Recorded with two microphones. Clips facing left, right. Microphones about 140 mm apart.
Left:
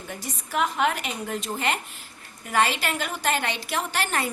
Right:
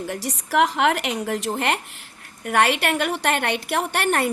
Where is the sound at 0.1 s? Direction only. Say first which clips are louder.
Right 5 dB; 75° right (ahead or behind).